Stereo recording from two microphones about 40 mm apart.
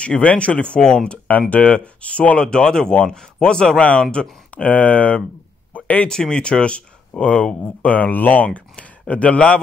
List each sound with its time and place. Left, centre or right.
0.0 s speech: left
0.7 s speech: centre; by 2.4 s left
2.4 s speech: left
4.6 s speech: left
5.7 s a sound: left
6.0 s speech: centre
7.8 s speech: left
8.5 s speech: left